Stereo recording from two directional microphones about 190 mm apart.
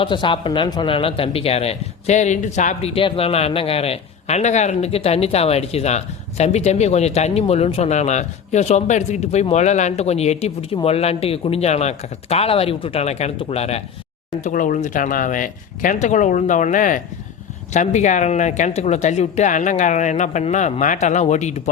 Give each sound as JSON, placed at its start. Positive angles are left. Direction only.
{"t": 0.0, "sound": "speech", "side_deg": 25}
{"t": 14.4, "sound": "speech", "side_deg": 45}